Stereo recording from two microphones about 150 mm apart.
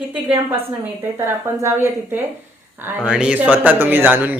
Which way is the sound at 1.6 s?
15° right (ahead or behind).